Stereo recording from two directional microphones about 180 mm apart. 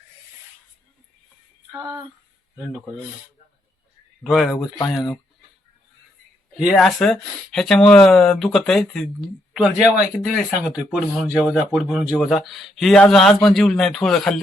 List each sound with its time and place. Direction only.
1.7 s a sound: 20° right (ahead or behind)
4.2 s speech: centre (ahead or behind)
6.6 s speech: centre (ahead or behind)